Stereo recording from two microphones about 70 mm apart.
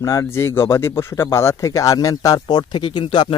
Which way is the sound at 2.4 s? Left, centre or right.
Left.